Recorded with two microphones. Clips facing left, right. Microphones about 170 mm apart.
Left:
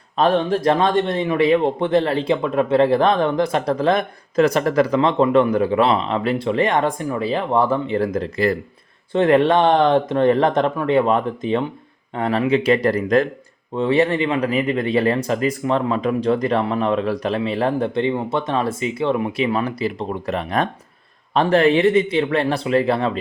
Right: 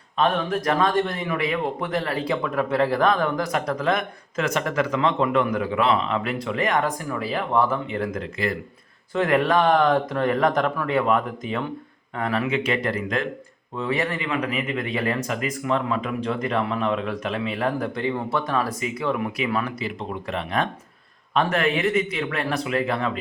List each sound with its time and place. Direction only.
0.2 s a man's voice: 30° left (ahead or behind)
13.7 s speech: 30° left (ahead or behind)
21.3 s speech: 30° left (ahead or behind)